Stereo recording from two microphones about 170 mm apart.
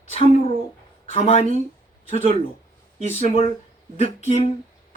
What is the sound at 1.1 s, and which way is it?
Speech, 40° left (ahead or behind).